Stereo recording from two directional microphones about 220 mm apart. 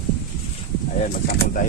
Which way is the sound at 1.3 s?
45° left (ahead or behind).